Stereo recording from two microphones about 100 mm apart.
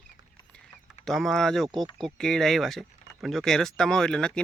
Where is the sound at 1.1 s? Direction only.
Centre (ahead or behind).